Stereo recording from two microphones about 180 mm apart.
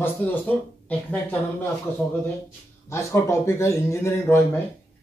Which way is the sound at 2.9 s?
15° left (ahead or behind).